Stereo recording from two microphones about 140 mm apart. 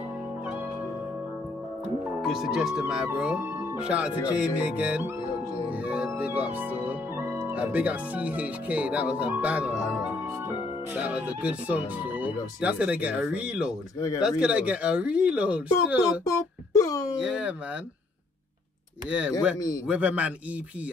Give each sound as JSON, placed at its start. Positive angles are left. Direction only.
{"t": 2.2, "sound": "speech", "side_deg": 0}
{"t": 3.5, "sound": "music", "side_deg": -20}
{"t": 3.8, "sound": "speech", "side_deg": -10}
{"t": 10.9, "sound": "speech", "side_deg": -10}
{"t": 16.3, "sound": "a sound", "side_deg": 20}
{"t": 17.2, "sound": "speech", "side_deg": -5}
{"t": 19.0, "sound": "speech", "side_deg": -10}